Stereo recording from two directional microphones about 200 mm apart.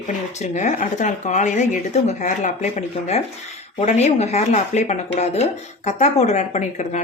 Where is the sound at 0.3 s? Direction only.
35° left (ahead or behind).